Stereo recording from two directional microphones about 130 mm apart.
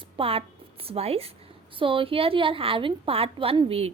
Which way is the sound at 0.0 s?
45° right (ahead or behind).